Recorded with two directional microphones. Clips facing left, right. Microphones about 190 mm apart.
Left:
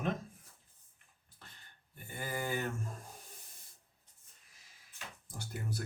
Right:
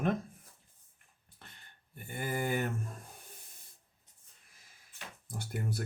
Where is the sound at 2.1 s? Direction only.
55° right (ahead or behind).